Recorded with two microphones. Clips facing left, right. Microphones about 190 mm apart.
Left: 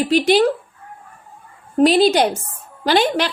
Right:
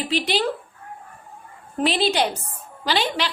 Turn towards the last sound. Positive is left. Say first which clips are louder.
# left 7 dB
turn(degrees=50)  # may be behind; listen again after turning